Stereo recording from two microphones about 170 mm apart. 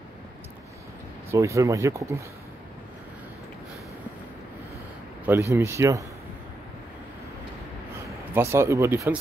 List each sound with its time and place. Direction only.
1.3 s speech: 20° right (ahead or behind)
5.2 s speech: 15° right (ahead or behind)
8.4 s speech: 15° right (ahead or behind)